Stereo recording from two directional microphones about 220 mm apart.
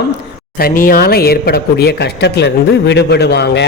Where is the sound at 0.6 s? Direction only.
40° left (ahead or behind).